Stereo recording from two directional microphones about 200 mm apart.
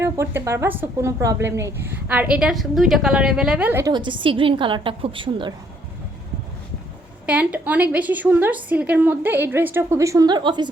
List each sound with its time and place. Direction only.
0.0 s a woman's voice: 15° right (ahead or behind)
3.9 s a woman's voice: 25° right (ahead or behind)
7.3 s a woman's voice: 5° right (ahead or behind); by 10.7 s 20° right (ahead or behind)